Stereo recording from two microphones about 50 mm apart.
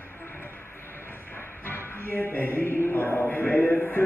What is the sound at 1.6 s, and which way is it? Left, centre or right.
Music, left.